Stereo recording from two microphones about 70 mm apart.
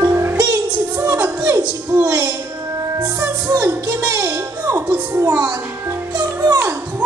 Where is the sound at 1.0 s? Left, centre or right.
Right.